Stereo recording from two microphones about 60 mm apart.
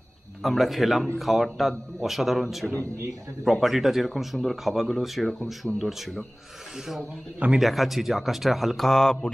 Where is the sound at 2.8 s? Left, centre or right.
Right.